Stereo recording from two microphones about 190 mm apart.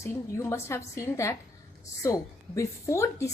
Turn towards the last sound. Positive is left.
turn(degrees=15)  # may be behind; listen again after turning